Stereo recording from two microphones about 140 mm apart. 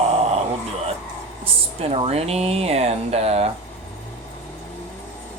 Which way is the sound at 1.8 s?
45° right (ahead or behind).